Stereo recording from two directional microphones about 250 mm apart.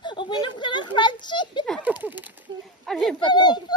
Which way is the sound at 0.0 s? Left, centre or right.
Centre.